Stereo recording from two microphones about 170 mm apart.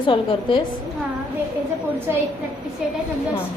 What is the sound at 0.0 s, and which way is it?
Speech, 30° left (ahead or behind).